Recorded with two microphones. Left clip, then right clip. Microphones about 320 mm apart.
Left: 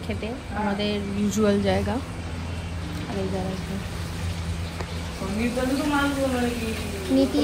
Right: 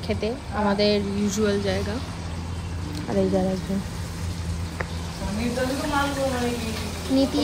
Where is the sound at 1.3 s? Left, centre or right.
Centre.